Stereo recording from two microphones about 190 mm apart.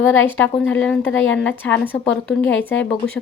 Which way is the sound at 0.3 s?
10° left (ahead or behind).